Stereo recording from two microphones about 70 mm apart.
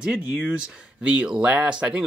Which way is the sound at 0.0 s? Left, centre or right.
Centre.